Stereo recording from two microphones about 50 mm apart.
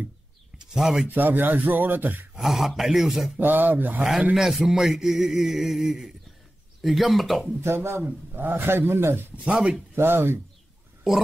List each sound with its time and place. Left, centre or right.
0.6 s speech: centre
1.0 s speech: right
2.3 s a man's voice: centre
3.3 s speech: right
4.6 s a sound: centre
6.8 s a man's voice: centre
7.6 s speech: right
8.3 s a man's voice: right
9.4 s speech: right
9.9 s a man's voice: right